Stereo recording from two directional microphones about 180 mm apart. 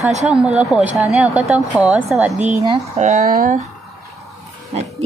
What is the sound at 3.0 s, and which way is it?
Speech, 40° right (ahead or behind).